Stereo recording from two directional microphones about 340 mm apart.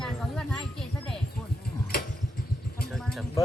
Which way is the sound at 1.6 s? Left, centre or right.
Left.